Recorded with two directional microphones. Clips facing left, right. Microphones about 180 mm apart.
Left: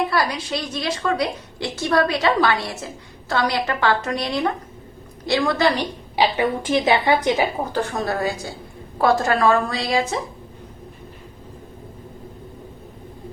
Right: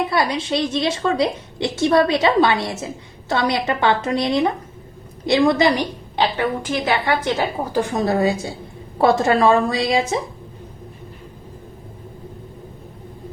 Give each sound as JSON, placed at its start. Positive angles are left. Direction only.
{"t": 0.1, "sound": "a woman's voice", "side_deg": -25}
{"t": 6.1, "sound": "a woman's voice", "side_deg": 20}
{"t": 7.6, "sound": "a woman's voice", "side_deg": -15}